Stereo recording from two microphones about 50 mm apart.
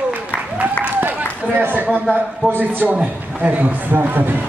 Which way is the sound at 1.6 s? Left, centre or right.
Right.